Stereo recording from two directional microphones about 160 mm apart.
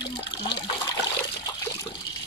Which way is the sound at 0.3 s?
25° left (ahead or behind).